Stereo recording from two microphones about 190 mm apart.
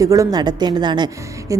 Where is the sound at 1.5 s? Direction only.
20° right (ahead or behind).